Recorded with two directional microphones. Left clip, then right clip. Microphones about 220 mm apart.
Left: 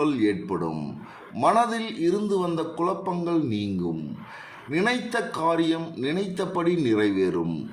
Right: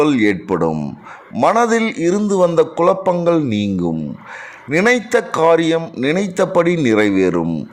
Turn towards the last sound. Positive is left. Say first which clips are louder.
# right 9 dB
turn(degrees=-40)  # may be behind; listen again after turning